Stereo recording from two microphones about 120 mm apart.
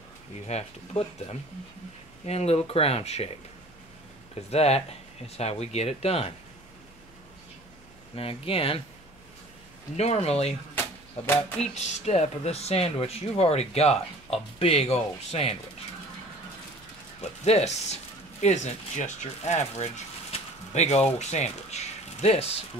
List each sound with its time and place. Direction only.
0.5 s speech: 65° left (ahead or behind)
4.5 s speech: 60° left (ahead or behind)
8.2 s speech: 50° left (ahead or behind)
9.9 s speech: 60° left (ahead or behind)
10.7 s a sound: 15° left (ahead or behind)
11.7 s speech: 70° left (ahead or behind)
17.5 s speech: 65° left (ahead or behind)
18.4 s speech: 75° left (ahead or behind); by 22.6 s 55° left (ahead or behind)